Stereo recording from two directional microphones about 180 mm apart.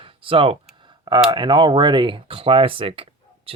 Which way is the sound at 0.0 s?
30° right (ahead or behind).